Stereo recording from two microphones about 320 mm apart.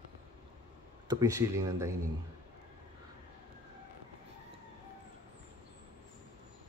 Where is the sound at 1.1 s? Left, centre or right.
Centre.